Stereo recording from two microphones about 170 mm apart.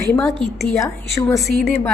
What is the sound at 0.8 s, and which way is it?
Speech, 15° left (ahead or behind).